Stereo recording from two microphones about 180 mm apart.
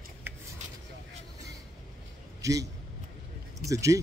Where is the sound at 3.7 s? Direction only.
15° right (ahead or behind).